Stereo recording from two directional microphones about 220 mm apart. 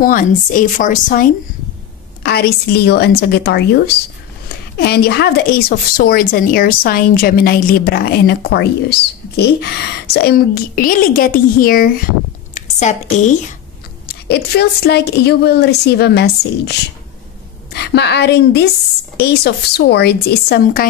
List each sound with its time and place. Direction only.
0.0 s a woman's voice: 40° left (ahead or behind)
14.0 s speech: 50° left (ahead or behind)
17.7 s speech: 50° left (ahead or behind)